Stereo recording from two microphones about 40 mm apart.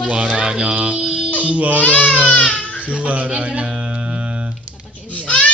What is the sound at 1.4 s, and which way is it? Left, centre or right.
Baby cry, right.